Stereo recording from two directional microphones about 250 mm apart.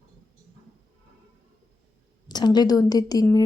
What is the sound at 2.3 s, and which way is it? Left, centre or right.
A woman's voice, centre.